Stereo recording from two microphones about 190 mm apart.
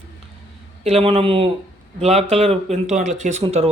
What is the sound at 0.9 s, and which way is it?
Speech, 30° right (ahead or behind).